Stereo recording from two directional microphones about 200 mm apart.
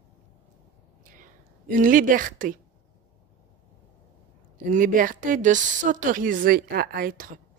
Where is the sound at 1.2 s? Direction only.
45° right (ahead or behind).